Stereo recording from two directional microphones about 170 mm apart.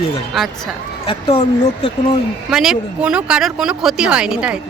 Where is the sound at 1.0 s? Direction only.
35° left (ahead or behind).